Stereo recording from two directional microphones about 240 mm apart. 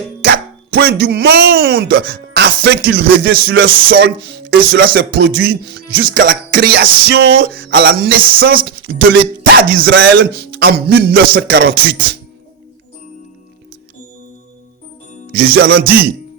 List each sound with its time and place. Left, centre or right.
0.3 s speech: right
3.4 s a man's voice: right
15.4 s a man's voice: right